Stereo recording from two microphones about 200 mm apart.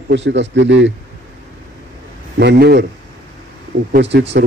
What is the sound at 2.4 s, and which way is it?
Speech, 55° right (ahead or behind).